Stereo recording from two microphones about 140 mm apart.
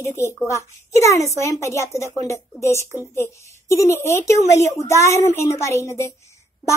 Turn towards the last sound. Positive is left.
turn(degrees=20)  # may be behind; listen again after turning